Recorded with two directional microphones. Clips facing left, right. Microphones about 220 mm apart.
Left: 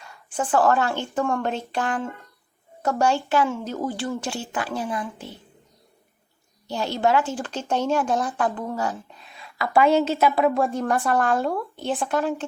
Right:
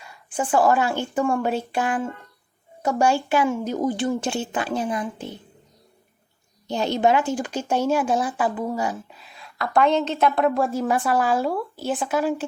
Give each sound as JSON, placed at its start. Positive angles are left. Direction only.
{"t": 0.0, "sound": "speech", "side_deg": -10}
{"t": 3.0, "sound": "speech", "side_deg": -10}
{"t": 6.7, "sound": "a woman's voice", "side_deg": -20}